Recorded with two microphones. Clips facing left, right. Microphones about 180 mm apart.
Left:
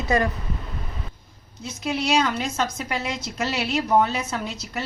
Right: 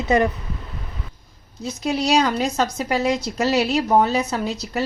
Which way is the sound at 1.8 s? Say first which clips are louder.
Right 3 dB; 40° right (ahead or behind).